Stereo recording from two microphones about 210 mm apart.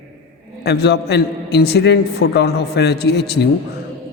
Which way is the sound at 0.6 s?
50° left (ahead or behind).